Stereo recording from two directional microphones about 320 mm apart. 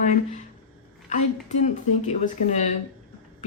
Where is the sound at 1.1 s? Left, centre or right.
Left.